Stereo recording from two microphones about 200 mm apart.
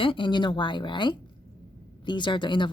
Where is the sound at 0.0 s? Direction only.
25° left (ahead or behind).